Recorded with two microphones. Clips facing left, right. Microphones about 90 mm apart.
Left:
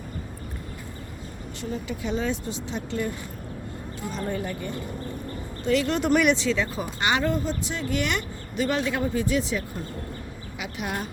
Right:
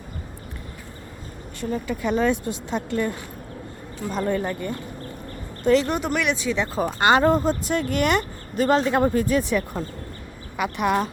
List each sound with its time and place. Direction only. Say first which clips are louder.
1.7 s speech: right 5 dB; 50° right (ahead or behind)
4.1 s a woman's voice: right 6 dB; 55° right (ahead or behind)
6.0 s speech: left 3 dB; centre (ahead or behind)
6.7 s speech: right 7 dB; 45° right (ahead or behind)
9.0 s a woman's voice: right 5 dB; 50° right (ahead or behind)